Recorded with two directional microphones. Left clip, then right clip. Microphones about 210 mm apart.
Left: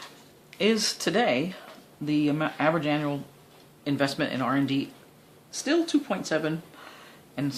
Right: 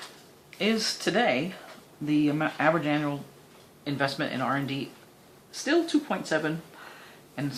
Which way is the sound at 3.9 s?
50° left (ahead or behind).